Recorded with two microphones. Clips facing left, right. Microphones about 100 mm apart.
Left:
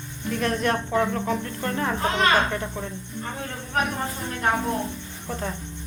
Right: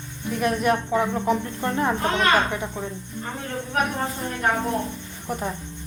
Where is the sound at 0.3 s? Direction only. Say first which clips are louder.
Right 2 dB; 10° right (ahead or behind).